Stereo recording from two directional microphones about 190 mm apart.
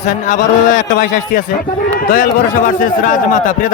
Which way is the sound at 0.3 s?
40° left (ahead or behind).